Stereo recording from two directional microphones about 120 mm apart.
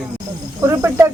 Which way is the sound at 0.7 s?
20° right (ahead or behind).